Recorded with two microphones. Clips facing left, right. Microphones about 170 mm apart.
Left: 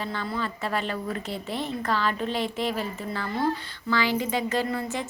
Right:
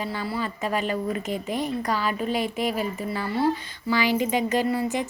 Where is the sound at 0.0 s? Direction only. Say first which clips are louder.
Right 2 dB; 10° right (ahead or behind).